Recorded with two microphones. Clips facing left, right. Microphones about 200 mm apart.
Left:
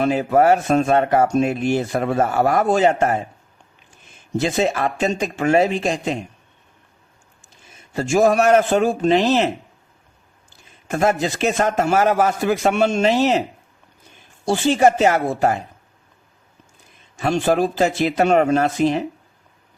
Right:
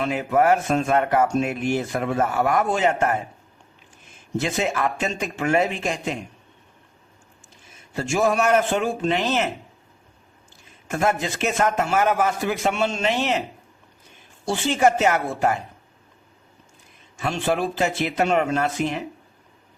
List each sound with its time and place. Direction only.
0.0 s speech: 40° left (ahead or behind)
4.4 s speech: 35° left (ahead or behind)
7.9 s speech: 40° left (ahead or behind)
10.8 s speech: 35° left (ahead or behind)
14.4 s speech: 35° left (ahead or behind)
17.2 s speech: 40° left (ahead or behind)